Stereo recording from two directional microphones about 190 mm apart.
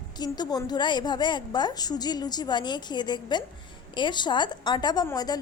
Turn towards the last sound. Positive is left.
turn(degrees=20)  # may be behind; listen again after turning